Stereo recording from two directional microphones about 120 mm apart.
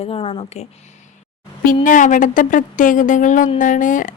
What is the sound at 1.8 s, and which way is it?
Speech, 90° left.